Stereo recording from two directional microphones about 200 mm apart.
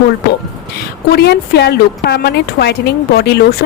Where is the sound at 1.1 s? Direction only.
55° left (ahead or behind).